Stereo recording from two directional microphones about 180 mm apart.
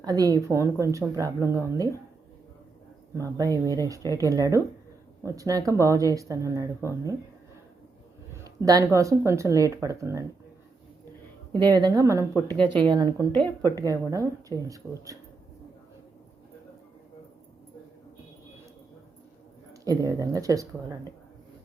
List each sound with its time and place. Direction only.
0.0 s speech: 20° right (ahead or behind)
3.2 s a woman's voice: 20° right (ahead or behind)
8.4 s speech: 20° right (ahead or behind)
11.5 s a woman's voice: 20° right (ahead or behind)
13.6 s a woman's voice: 15° left (ahead or behind)
13.8 s speech: 20° right (ahead or behind)
19.8 s a woman's voice: 20° right (ahead or behind)